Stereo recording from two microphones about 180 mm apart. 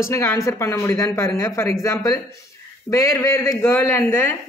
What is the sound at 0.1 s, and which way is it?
Speech, 15° left (ahead or behind).